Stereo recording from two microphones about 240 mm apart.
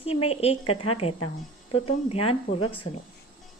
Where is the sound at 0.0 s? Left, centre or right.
Left.